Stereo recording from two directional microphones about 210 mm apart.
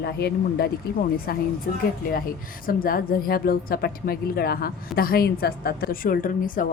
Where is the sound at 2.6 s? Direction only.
45° left (ahead or behind).